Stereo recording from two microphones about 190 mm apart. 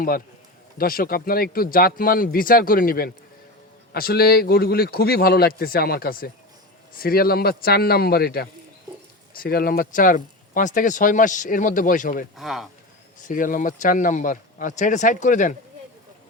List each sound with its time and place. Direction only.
0.8 s speech: 50° left (ahead or behind)
12.4 s speech: centre (ahead or behind)
13.2 s speech: 45° left (ahead or behind)